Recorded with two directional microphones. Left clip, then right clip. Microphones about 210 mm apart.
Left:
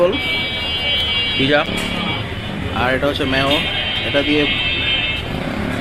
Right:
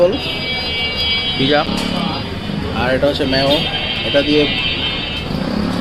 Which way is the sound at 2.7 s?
5° right (ahead or behind).